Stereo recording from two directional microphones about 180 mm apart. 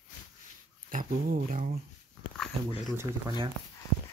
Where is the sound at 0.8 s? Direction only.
50° right (ahead or behind).